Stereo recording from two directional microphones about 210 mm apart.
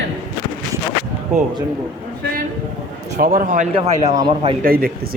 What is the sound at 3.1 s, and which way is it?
Speech, 45° right (ahead or behind).